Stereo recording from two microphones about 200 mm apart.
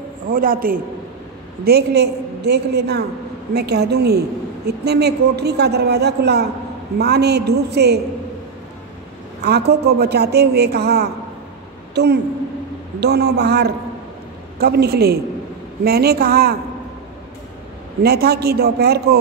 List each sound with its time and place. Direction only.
0.3 s a woman's voice: 45° right (ahead or behind)
9.4 s a woman's voice: 55° right (ahead or behind)
18.0 s speech: 50° right (ahead or behind)